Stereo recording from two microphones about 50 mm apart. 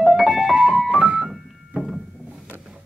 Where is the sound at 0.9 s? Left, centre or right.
Right.